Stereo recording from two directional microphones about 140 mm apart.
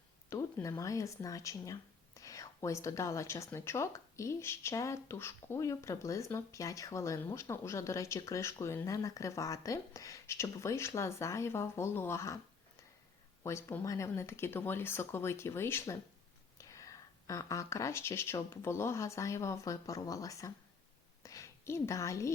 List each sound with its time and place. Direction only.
0.3 s speech: 20° left (ahead or behind)
13.4 s a woman's voice: 20° left (ahead or behind)